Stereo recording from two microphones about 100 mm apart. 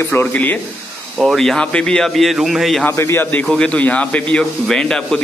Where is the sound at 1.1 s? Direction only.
Centre (ahead or behind).